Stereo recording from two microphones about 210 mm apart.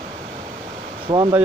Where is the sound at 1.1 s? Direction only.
25° right (ahead or behind).